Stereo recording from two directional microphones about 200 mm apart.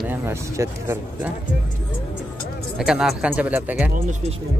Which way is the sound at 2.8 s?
5° right (ahead or behind).